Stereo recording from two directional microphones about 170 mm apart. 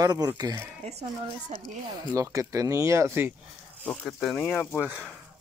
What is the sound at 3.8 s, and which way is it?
Speech, 10° left (ahead or behind).